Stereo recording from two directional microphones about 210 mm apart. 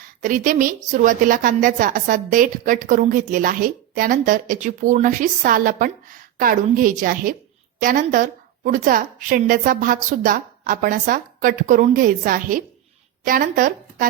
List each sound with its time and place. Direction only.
0.2 s a woman's voice: 40° right (ahead or behind)